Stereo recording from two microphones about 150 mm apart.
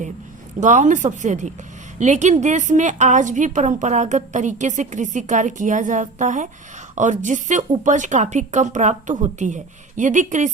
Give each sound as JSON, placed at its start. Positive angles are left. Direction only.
{"t": 0.6, "sound": "a woman's voice", "side_deg": -55}